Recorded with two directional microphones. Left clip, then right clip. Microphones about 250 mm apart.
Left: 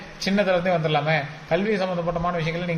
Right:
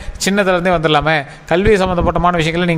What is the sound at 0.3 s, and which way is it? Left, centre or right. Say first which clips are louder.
A man's voice: right 7 dB; right.